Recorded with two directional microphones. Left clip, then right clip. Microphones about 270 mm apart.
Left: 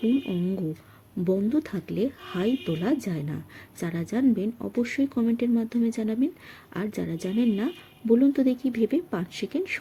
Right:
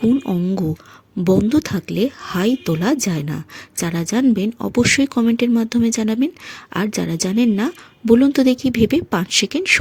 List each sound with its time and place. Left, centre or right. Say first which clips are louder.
1.2 s speech: right 9 dB; right